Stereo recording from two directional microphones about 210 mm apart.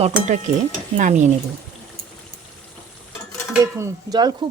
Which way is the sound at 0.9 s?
35° right (ahead or behind).